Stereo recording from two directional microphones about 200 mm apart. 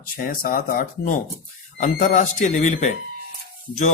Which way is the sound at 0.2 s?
45° left (ahead or behind).